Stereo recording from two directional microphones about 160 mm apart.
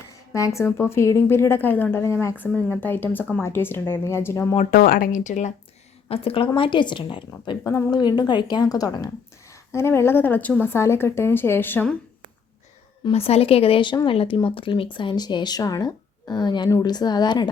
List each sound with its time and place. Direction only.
0.3 s speech: 20° left (ahead or behind)
4.7 s speech: 65° left (ahead or behind); by 5.5 s 50° left (ahead or behind)
6.1 s speech: 35° left (ahead or behind); by 11.9 s 10° left (ahead or behind)
13.1 s speech: 35° left (ahead or behind)